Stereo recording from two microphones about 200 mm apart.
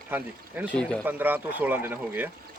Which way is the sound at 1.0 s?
10° right (ahead or behind).